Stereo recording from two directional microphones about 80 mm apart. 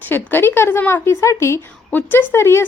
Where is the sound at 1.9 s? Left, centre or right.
Left.